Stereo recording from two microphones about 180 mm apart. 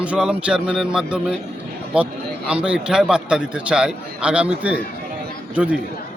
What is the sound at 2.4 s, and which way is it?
A man's voice, 5° right (ahead or behind).